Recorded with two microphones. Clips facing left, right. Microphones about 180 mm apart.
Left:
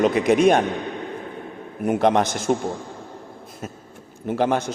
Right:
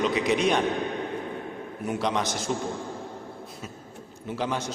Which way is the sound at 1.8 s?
55° left (ahead or behind).